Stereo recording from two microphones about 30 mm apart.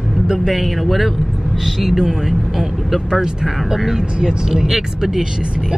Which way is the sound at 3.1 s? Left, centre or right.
Centre.